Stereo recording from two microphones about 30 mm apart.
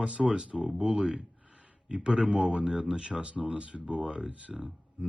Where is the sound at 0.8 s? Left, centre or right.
Right.